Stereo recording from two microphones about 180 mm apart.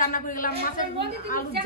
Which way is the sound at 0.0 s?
50° left (ahead or behind).